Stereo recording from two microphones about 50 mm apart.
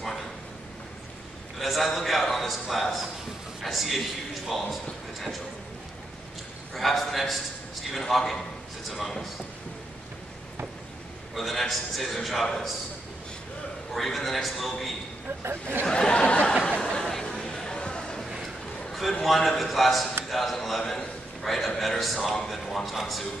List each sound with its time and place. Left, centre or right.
1.6 s a man's voice: centre
6.7 s a man's voice: centre
11.3 s a man's voice: centre
13.9 s a man's voice: centre
15.8 s speech: centre
16.6 s a sound: centre
18.9 s a man's voice: centre